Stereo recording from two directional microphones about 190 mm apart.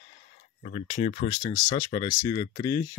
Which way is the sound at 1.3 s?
25° left (ahead or behind).